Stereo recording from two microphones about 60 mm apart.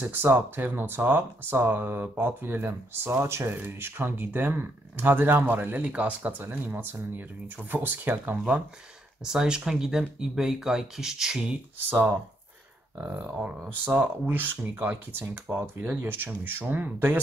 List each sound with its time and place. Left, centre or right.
0.1 s speech: right
5.9 s speech: right
9.2 s speech: centre
11.9 s speech: right